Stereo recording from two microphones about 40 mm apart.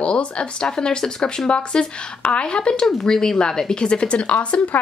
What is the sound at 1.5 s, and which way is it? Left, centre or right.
Speech, left.